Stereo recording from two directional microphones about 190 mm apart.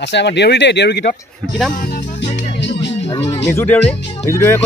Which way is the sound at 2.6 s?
65° left (ahead or behind).